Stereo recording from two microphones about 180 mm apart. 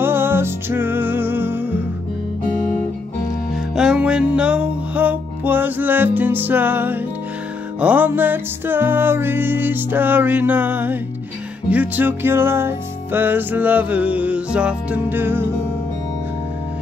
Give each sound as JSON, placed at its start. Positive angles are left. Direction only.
{"t": 0.0, "sound": "music", "side_deg": -10}
{"t": 3.7, "sound": "music", "side_deg": -5}